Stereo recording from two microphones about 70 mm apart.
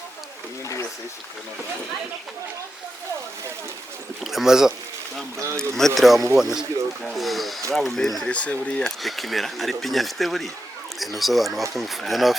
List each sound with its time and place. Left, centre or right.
4.2 s speech: centre
5.5 s speech: centre
8.3 s speech: centre
8.8 s speech: centre